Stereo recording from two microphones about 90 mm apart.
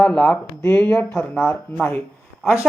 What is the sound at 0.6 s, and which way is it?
Speech, 30° left (ahead or behind).